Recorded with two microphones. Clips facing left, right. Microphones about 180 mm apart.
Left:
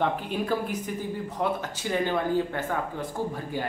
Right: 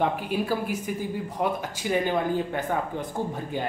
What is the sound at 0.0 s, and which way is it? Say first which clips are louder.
A man's voice: right 2 dB; 10° right (ahead or behind).